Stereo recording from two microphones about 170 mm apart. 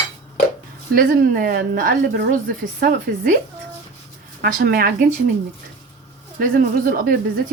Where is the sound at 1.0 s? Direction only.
60° right (ahead or behind).